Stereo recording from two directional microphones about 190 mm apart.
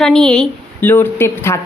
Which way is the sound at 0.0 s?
5° left (ahead or behind).